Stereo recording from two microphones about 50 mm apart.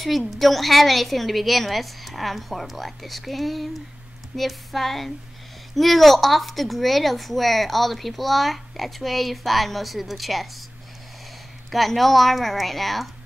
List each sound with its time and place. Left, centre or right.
0.3 s a woman's voice: centre
11.7 s a woman's voice: centre